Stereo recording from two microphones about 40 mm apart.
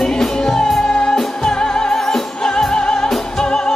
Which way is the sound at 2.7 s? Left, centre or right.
Left.